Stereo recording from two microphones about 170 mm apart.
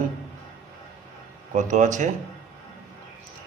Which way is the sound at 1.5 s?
45° right (ahead or behind).